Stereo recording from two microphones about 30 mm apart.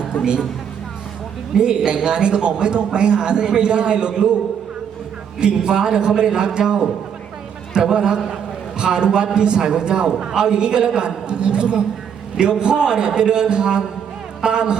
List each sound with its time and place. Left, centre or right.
1.5 s a man's voice: right
5.4 s a man's voice: right